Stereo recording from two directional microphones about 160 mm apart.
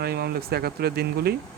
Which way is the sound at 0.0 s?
75° right (ahead or behind).